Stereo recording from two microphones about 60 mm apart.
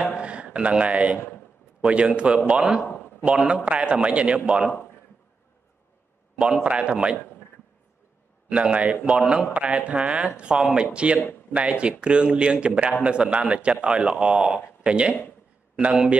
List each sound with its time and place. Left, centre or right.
0.1 s a sound: centre
1.8 s a man's voice: centre
3.6 s a man's voice: centre
6.3 s a man's voice: centre
8.5 s a man's voice: centre